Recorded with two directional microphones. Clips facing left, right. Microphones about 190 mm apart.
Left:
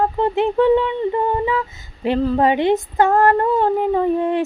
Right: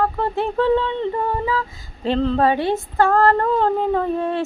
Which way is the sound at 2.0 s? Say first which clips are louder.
Left 1 dB; 10° left (ahead or behind).